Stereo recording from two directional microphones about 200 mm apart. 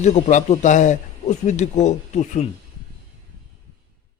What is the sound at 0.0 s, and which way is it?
A man's voice, 35° left (ahead or behind).